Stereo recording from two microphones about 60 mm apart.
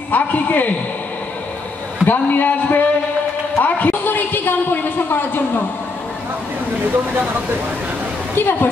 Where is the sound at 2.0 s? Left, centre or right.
Left.